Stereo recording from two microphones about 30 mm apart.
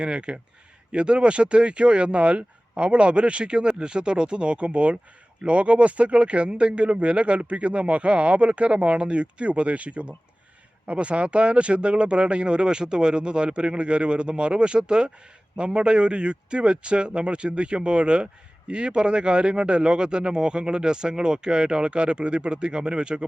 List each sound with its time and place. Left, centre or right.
0.0 s speech: right
21.8 s speech: right